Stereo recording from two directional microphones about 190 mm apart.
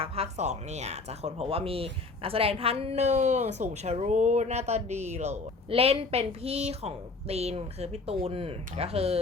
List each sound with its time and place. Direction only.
0.0 s speech: 35° right (ahead or behind)